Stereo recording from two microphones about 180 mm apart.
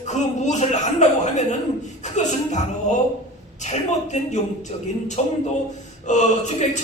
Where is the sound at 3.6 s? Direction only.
40° left (ahead or behind).